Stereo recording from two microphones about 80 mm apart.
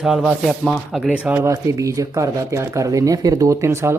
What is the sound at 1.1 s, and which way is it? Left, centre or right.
Speech, centre.